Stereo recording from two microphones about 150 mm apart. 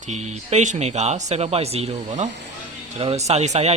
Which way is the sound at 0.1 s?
55° right (ahead or behind).